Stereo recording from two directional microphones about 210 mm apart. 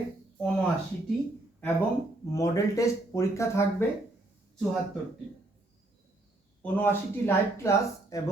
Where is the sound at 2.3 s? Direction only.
15° left (ahead or behind).